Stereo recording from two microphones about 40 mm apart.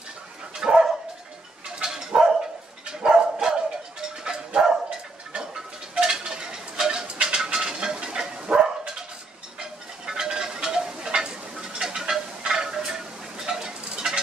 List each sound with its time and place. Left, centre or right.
0.6 s dog: centre
3.2 s bow-wow: centre
4.2 s dog: centre
5.3 s a sound: centre
7.3 s dog: centre
9.6 s a sound: centre